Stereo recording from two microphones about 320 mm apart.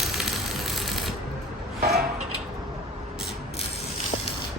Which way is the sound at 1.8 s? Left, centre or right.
Right.